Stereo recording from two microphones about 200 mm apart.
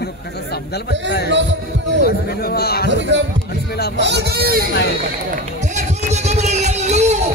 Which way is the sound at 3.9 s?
60° right (ahead or behind).